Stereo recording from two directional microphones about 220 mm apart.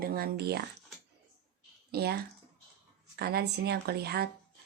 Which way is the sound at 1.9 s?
45° right (ahead or behind).